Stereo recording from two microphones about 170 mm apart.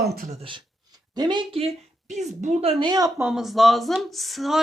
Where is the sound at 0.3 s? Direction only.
30° right (ahead or behind).